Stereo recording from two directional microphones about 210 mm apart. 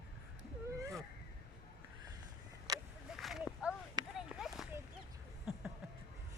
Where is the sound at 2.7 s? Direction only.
15° right (ahead or behind).